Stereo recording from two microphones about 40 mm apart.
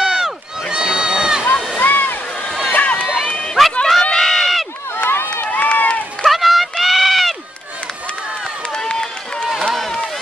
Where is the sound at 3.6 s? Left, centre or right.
Centre.